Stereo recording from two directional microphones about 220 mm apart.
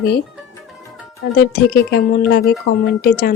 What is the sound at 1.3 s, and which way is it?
Speech, 45° left (ahead or behind).